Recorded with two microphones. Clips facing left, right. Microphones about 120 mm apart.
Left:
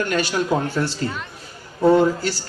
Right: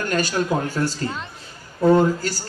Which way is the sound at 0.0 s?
40° right (ahead or behind).